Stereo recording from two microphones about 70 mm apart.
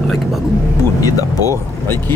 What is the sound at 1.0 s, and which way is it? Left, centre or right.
Speech, left.